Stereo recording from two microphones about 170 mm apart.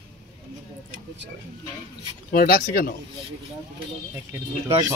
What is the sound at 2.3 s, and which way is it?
Speech, 60° left (ahead or behind).